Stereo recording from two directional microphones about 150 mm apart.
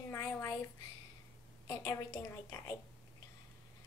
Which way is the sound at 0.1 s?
20° left (ahead or behind).